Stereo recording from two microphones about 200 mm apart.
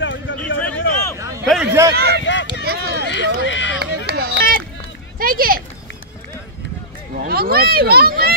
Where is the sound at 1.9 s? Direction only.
50° right (ahead or behind).